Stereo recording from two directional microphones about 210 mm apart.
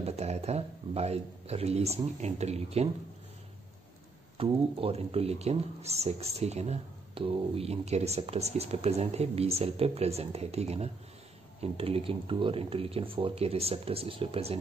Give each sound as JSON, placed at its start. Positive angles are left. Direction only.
{"t": 0.0, "sound": "a man's voice", "side_deg": -30}
{"t": 4.4, "sound": "speech", "side_deg": -25}